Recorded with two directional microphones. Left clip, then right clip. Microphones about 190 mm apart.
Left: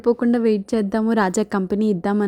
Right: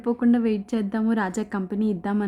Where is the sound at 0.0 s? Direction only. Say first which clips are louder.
Left 5 dB; 25° left (ahead or behind).